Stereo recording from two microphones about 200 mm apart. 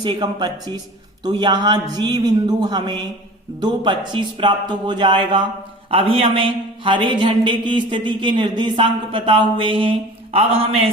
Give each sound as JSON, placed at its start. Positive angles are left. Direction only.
{"t": 0.0, "sound": "speech", "side_deg": -20}